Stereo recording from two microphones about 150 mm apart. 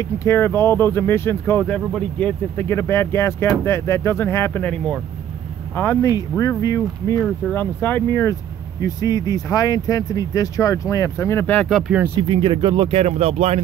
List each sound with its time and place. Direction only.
0.2 s speech: 15° left (ahead or behind)
5.8 s speech: 20° left (ahead or behind)
7.2 s speech: 15° left (ahead or behind)
12.2 s speech: 35° right (ahead or behind)